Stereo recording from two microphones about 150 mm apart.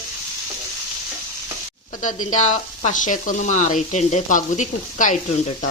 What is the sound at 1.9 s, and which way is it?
Speech, 60° left (ahead or behind).